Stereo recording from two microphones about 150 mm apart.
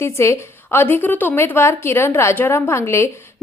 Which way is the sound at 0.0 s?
20° left (ahead or behind).